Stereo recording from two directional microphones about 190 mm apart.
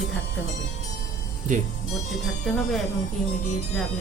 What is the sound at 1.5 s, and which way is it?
Speech, 40° right (ahead or behind).